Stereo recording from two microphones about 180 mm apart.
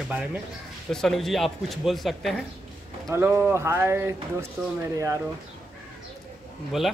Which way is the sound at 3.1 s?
15° right (ahead or behind).